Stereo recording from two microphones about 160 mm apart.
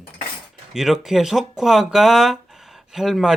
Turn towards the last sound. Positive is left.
turn(degrees=-5)  # may be behind; listen again after turning